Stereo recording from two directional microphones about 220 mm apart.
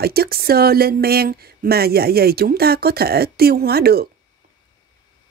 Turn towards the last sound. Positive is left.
turn(degrees=-45)  # may be behind; listen again after turning